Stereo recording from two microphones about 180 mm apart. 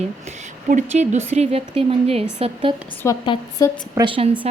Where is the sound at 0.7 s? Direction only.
40° right (ahead or behind).